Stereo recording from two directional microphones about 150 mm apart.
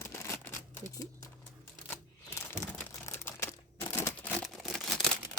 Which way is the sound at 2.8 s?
15° left (ahead or behind).